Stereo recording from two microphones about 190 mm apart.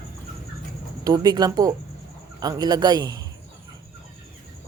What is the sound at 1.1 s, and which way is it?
Speech, 20° right (ahead or behind).